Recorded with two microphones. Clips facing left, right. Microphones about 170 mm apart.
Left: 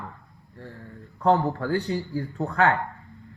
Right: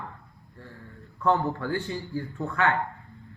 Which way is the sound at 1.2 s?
40° left (ahead or behind).